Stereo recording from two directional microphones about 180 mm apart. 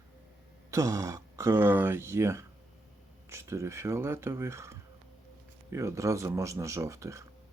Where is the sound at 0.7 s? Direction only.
15° right (ahead or behind).